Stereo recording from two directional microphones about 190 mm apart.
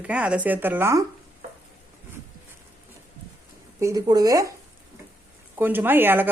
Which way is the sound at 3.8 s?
20° right (ahead or behind).